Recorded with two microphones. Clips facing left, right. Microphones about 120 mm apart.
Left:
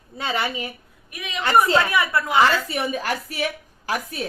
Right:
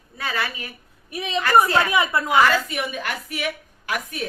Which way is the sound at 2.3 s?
30° left (ahead or behind).